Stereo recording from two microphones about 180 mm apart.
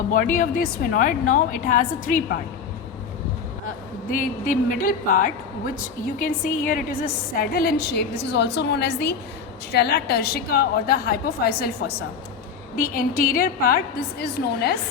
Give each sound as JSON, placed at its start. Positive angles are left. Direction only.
{"t": 0.1, "sound": "a woman's voice", "side_deg": 50}
{"t": 4.1, "sound": "a woman's voice", "side_deg": 50}
{"t": 7.5, "sound": "a woman's voice", "side_deg": 60}